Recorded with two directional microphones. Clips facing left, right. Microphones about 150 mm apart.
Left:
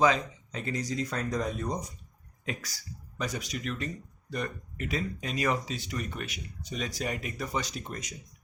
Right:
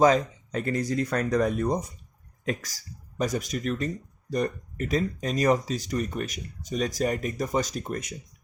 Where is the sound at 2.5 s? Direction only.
40° right (ahead or behind).